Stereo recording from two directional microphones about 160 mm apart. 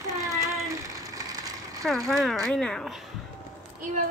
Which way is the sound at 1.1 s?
20° right (ahead or behind).